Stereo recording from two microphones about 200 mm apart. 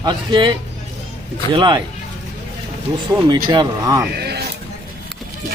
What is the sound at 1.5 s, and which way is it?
Speech, 20° right (ahead or behind).